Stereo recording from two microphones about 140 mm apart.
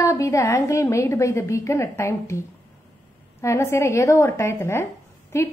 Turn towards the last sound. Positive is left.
turn(degrees=20)  # may be behind; listen again after turning